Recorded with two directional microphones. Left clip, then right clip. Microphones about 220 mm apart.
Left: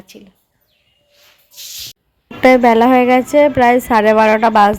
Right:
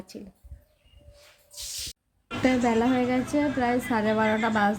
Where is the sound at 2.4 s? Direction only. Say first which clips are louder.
Left 15 dB; 40° left (ahead or behind).